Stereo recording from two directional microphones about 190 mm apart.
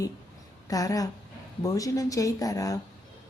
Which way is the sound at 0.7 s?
20° left (ahead or behind).